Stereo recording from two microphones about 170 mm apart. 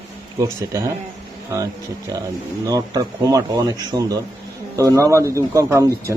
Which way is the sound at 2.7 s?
20° right (ahead or behind).